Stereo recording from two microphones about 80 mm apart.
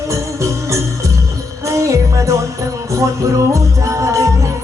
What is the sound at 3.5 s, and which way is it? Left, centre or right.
Music, right.